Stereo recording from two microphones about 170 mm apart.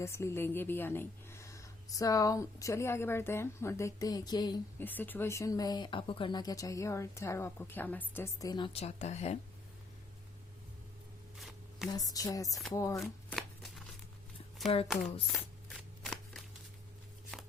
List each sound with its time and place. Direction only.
0.0 s a woman's voice: 15° left (ahead or behind)
4.8 s speech: 10° left (ahead or behind); by 9.4 s 40° left (ahead or behind)
11.3 s a sound: centre (ahead or behind)
11.9 s speech: 20° left (ahead or behind)
13.0 s shuffling cards: centre (ahead or behind)
14.6 s speech: centre (ahead or behind)